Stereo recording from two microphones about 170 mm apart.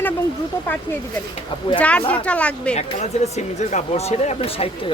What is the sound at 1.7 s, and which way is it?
Speech, 5° left (ahead or behind).